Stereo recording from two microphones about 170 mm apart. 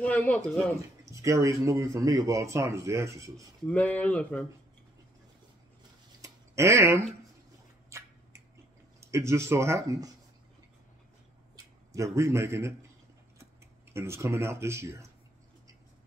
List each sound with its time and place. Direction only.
0.0 s speech: 10° left (ahead or behind)
1.1 s speech: 20° right (ahead or behind)
3.6 s speech: 10° left (ahead or behind)
6.2 s a sound: 15° right (ahead or behind)
9.0 s speech: 15° right (ahead or behind)
11.5 s speech: 20° right (ahead or behind)
13.9 s speech: 15° right (ahead or behind)